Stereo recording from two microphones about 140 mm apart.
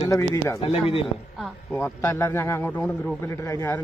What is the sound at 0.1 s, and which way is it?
Speech, 20° left (ahead or behind).